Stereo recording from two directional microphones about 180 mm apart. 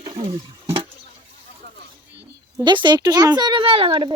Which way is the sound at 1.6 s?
65° right (ahead or behind).